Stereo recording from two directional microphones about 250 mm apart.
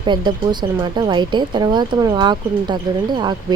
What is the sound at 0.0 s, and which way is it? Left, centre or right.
A woman's voice, centre.